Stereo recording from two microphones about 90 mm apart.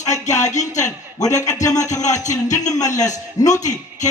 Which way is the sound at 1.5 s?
40° left (ahead or behind).